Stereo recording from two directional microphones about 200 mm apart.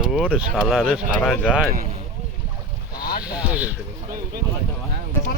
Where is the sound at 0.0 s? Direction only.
Centre (ahead or behind).